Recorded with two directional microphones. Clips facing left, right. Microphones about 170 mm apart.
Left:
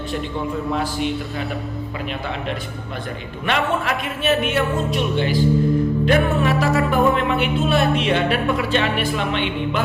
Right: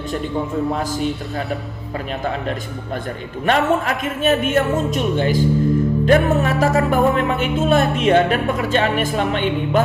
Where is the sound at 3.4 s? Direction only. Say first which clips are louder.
Right 4 dB; 40° right (ahead or behind).